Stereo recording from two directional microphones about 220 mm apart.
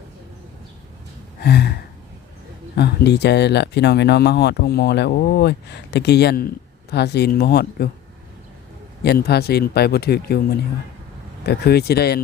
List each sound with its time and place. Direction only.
1.4 s gasp: 45° left (ahead or behind)
2.7 s speech: 50° left (ahead or behind)
9.0 s speech: 45° left (ahead or behind)
11.4 s speech: 45° left (ahead or behind)